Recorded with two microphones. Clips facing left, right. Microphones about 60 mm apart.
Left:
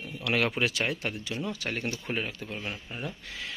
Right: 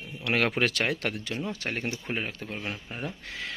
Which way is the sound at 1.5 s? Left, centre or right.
Right.